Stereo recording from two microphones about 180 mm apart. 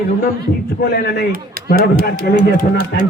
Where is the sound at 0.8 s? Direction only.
60° left (ahead or behind).